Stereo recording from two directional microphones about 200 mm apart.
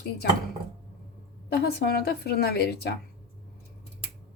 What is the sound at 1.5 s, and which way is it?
Speech, 55° left (ahead or behind).